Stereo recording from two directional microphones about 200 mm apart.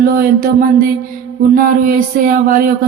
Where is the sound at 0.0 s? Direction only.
45° right (ahead or behind).